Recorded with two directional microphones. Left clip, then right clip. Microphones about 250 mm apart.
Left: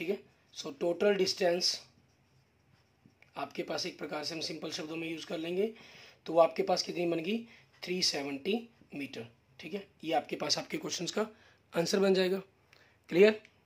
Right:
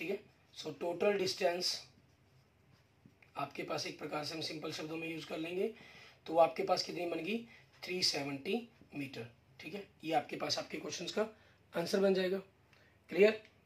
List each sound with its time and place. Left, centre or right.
0.0 s speech: left
3.3 s a man's voice: left